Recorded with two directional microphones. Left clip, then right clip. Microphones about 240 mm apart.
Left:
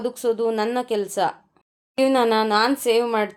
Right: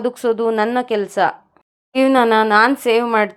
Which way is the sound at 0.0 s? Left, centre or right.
Centre.